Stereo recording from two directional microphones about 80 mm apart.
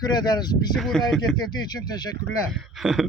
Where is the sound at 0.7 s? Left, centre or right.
Centre.